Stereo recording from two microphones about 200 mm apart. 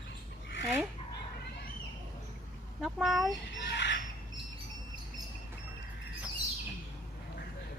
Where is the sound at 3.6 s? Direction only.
60° left (ahead or behind).